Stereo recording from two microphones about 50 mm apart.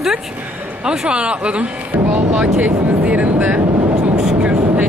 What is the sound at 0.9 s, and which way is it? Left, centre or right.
Speech, right.